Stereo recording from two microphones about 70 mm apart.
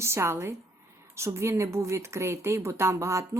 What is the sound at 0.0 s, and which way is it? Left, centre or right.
Speech, right.